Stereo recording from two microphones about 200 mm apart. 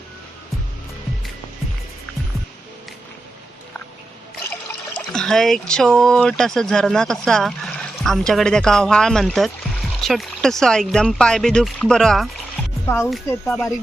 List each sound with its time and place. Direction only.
4.9 s speech: 5° left (ahead or behind)
12.8 s speech: 10° left (ahead or behind)
13.1 s speech: centre (ahead or behind)